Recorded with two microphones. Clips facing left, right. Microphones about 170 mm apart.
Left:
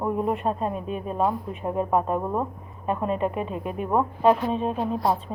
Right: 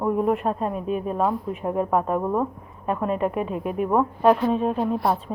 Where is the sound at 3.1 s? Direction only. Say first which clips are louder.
Right 3 dB; 5° right (ahead or behind).